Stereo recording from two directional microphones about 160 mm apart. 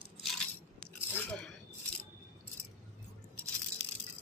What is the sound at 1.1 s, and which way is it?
Chewing, 10° left (ahead or behind).